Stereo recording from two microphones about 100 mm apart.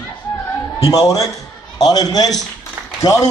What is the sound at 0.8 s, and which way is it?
A man's voice, 35° left (ahead or behind).